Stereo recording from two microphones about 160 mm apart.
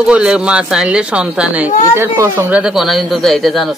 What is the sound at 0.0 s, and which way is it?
Speech, 5° right (ahead or behind).